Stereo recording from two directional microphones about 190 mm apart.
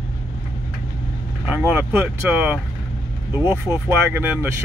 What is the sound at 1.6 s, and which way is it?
Speech, 10° right (ahead or behind).